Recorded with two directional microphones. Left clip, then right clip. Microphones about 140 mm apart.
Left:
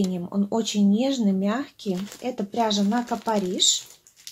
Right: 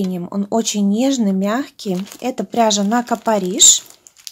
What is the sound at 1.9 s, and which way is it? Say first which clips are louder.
Speech: right 6 dB; 40° right (ahead or behind).